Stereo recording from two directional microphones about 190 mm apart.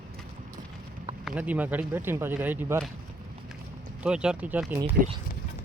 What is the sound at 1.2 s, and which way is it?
Speech, 10° right (ahead or behind).